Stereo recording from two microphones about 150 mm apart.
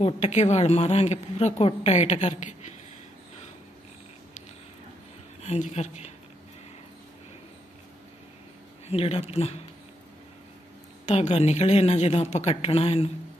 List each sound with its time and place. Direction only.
0.0 s a woman's voice: 45° left (ahead or behind)
5.4 s a woman's voice: 50° left (ahead or behind)
8.8 s a woman's voice: 40° left (ahead or behind)
11.1 s a woman's voice: 45° left (ahead or behind)